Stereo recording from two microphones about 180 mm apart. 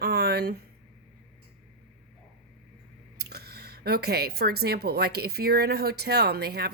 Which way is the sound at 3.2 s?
65° right (ahead or behind).